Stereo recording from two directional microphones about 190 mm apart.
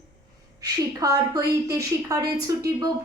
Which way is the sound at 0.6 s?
20° right (ahead or behind).